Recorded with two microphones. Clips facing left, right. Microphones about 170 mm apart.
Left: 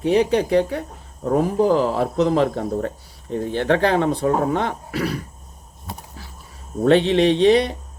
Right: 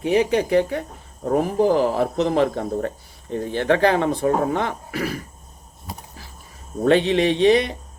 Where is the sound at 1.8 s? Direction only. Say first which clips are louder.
Even; 55° right (ahead or behind).